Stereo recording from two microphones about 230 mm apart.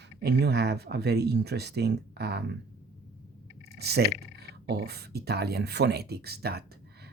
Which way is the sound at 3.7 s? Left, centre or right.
Right.